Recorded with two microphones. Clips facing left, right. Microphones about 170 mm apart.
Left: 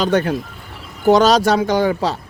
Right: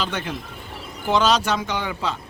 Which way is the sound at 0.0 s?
45° left (ahead or behind).